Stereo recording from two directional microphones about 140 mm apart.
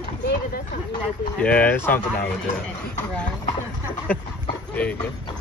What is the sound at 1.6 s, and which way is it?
Speech, 15° left (ahead or behind).